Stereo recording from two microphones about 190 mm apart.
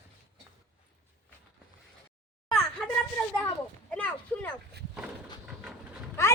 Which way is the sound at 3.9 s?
5° left (ahead or behind).